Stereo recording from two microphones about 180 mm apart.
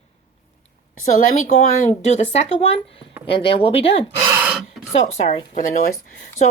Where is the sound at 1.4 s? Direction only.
40° left (ahead or behind).